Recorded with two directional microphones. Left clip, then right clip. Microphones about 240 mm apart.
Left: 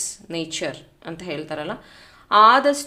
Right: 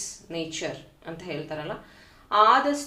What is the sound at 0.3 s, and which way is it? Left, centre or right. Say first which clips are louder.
A woman's voice: left 4 dB; left.